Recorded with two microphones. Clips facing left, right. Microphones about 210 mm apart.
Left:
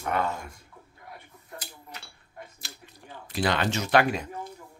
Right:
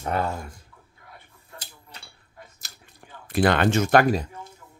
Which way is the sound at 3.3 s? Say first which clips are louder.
Right 6 dB; 55° right (ahead or behind).